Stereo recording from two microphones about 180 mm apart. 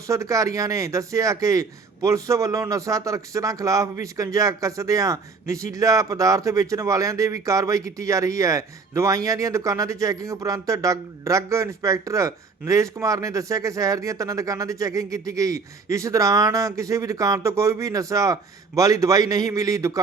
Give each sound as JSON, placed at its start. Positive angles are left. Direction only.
{"t": 0.1, "sound": "speech", "side_deg": -20}